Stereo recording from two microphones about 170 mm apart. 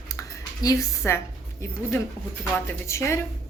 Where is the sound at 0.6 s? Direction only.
20° left (ahead or behind).